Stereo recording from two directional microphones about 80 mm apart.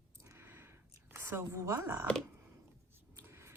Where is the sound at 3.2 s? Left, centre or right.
Right.